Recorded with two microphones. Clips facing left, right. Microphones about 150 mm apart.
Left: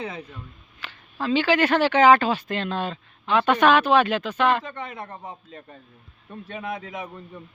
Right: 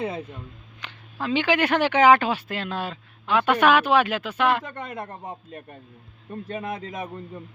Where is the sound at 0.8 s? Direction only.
15° right (ahead or behind).